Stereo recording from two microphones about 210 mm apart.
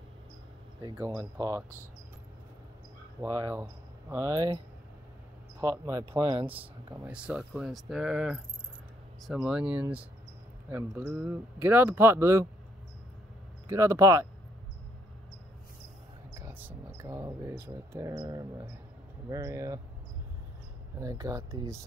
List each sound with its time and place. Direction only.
0.9 s speech: 15° right (ahead or behind)
3.2 s speech: 15° right (ahead or behind)
5.6 s speech: 15° right (ahead or behind)
13.7 s speech: 15° right (ahead or behind)
16.4 s speech: 10° right (ahead or behind)
21.0 s speech: 15° right (ahead or behind)